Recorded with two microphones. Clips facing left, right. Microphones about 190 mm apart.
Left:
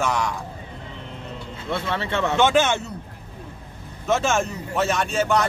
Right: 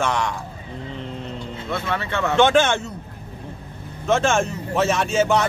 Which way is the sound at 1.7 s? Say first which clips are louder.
Even; 25° left (ahead or behind).